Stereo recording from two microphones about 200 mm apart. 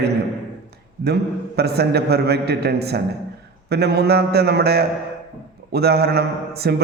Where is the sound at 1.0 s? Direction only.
55° right (ahead or behind).